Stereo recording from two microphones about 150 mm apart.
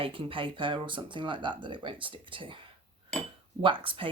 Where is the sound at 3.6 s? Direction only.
35° right (ahead or behind).